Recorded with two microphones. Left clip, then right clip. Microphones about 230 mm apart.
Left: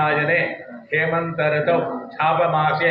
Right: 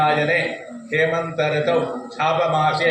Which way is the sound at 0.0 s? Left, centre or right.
Right.